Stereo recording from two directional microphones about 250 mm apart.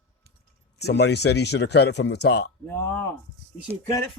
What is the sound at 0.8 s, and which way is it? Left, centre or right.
Speech, left.